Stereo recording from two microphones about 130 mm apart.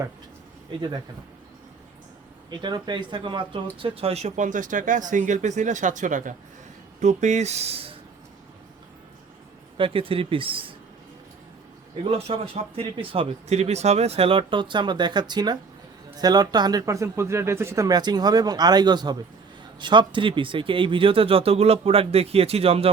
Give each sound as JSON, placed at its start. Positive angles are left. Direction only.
{"t": 2.5, "sound": "speech", "side_deg": -35}
{"t": 7.0, "sound": "speech", "side_deg": -65}
{"t": 9.7, "sound": "speech", "side_deg": -45}
{"t": 12.0, "sound": "speech", "side_deg": -45}